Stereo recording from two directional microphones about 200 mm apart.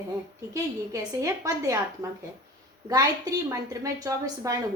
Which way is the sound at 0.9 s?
15° right (ahead or behind).